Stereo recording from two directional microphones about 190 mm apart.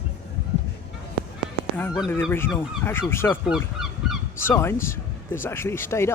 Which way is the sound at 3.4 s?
Centre (ahead or behind).